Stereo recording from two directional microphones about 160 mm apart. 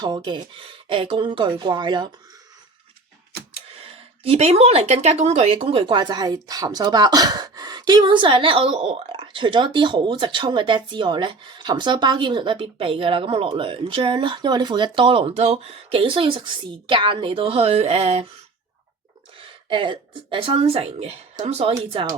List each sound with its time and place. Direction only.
0.0 s speech: 25° right (ahead or behind)
3.8 s speech: 35° right (ahead or behind)
19.4 s speech: 30° right (ahead or behind)